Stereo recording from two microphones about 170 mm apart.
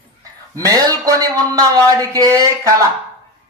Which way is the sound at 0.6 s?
20° right (ahead or behind).